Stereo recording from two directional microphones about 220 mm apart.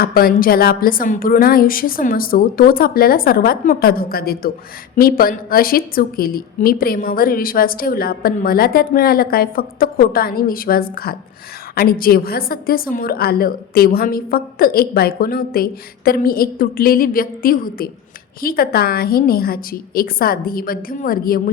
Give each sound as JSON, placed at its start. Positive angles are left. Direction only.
{"t": 0.0, "sound": "a woman's voice", "side_deg": 40}